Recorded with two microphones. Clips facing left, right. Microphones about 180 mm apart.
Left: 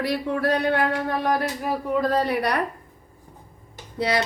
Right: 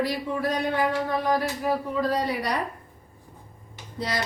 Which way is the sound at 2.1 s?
60° left (ahead or behind).